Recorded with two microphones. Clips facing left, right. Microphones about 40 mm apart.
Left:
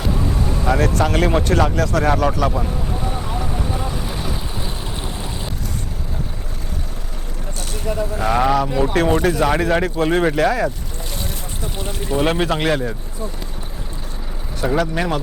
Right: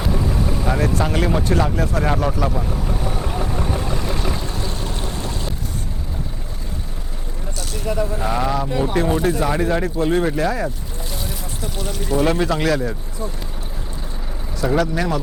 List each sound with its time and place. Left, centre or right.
0.0 s vehicle: centre
0.7 s speech: left
2.6 s boat: centre
4.0 s boat: centre
4.5 s stream: centre
7.9 s speech: right
8.3 s speech: left
8.5 s speech: left
10.3 s speech: left
11.8 s speech: left
12.1 s speech: left
14.6 s speech: left
14.9 s speech: left